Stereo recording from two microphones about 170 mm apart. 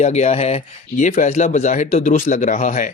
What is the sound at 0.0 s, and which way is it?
Speech, 40° left (ahead or behind).